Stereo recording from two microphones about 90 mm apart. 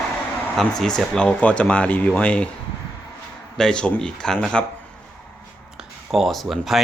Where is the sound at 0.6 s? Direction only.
5° left (ahead or behind).